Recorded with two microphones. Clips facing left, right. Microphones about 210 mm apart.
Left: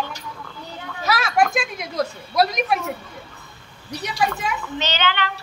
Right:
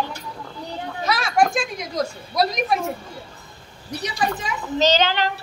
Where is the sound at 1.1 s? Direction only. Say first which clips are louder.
Even; 5° left (ahead or behind).